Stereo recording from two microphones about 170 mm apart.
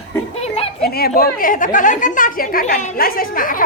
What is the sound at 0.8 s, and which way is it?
A woman's voice, 65° left (ahead or behind).